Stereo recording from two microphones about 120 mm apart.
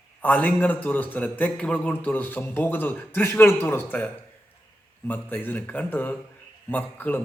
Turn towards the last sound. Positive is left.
turn(degrees=15)  # may be behind; listen again after turning